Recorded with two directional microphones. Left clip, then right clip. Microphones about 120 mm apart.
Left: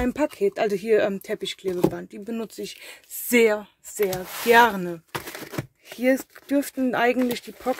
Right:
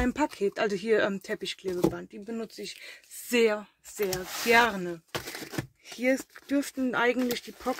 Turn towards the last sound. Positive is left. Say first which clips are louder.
# left 5 dB
turn(degrees=30)  # may be behind; listen again after turning